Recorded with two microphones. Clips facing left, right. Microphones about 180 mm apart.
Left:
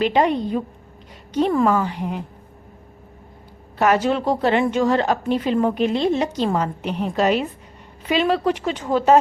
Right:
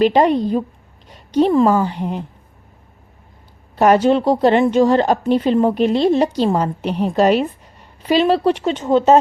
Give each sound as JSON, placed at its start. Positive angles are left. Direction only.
{"t": 0.0, "sound": "a woman's voice", "side_deg": -35}
{"t": 3.8, "sound": "a woman's voice", "side_deg": -30}